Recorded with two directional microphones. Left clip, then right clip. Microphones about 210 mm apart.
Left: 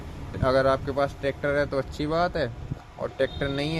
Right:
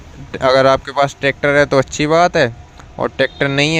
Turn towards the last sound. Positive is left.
turn(degrees=-30)  # may be behind; listen again after turning